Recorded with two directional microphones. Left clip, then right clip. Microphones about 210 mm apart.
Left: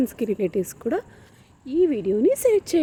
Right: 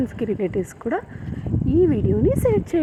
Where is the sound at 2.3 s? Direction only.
30° left (ahead or behind).